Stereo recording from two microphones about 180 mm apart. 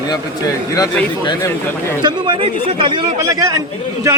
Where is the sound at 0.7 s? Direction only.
20° left (ahead or behind).